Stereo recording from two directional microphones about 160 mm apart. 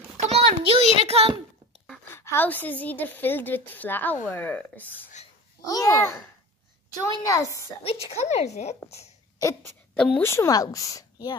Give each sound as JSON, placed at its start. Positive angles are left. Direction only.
{"t": 0.2, "sound": "a sound", "side_deg": -40}
{"t": 2.1, "sound": "a woman's voice", "side_deg": 15}
{"t": 5.7, "sound": "speech", "side_deg": 20}
{"t": 7.8, "sound": "a woman's voice", "side_deg": 40}
{"t": 9.9, "sound": "speech", "side_deg": 5}
{"t": 10.2, "sound": "speech", "side_deg": 15}